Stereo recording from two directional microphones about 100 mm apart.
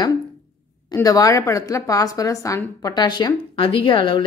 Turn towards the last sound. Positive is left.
turn(degrees=55)  # may be behind; listen again after turning